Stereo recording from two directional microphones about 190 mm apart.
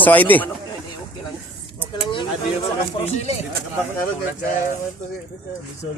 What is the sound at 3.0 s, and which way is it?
Speech, 35° left (ahead or behind).